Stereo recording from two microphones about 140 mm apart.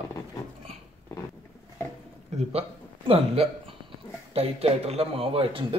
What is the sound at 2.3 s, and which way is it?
A man's voice, 50° right (ahead or behind).